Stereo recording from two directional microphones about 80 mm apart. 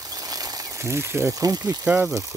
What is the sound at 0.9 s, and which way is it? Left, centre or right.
Speech, right.